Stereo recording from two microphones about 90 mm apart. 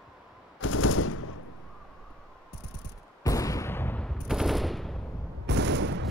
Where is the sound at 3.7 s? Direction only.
25° left (ahead or behind).